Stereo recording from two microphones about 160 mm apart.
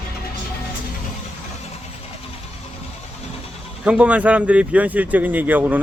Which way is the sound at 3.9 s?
10° right (ahead or behind).